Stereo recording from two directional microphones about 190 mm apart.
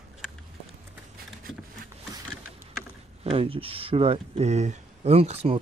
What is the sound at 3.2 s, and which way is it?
Speech, 30° right (ahead or behind).